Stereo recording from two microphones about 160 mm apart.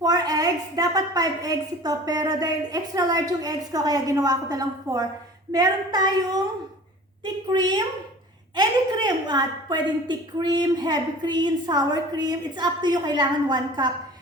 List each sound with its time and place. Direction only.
0.0 s a woman's voice: 25° right (ahead or behind)
8.5 s a woman's voice: 25° right (ahead or behind)